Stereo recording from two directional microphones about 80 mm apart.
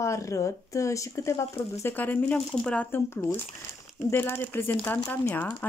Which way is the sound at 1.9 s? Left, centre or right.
Left.